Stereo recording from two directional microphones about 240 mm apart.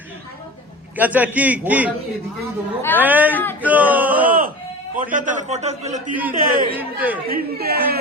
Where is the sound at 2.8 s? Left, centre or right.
Centre.